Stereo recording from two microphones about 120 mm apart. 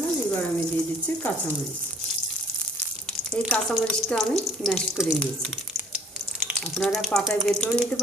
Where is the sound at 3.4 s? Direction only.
10° left (ahead or behind).